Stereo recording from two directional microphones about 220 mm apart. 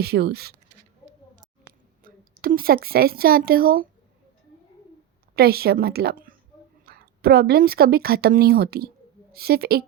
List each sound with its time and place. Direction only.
0.0 s a woman's voice: 45° right (ahead or behind)
2.0 s speech: 40° right (ahead or behind)
5.3 s a woman's voice: 45° right (ahead or behind)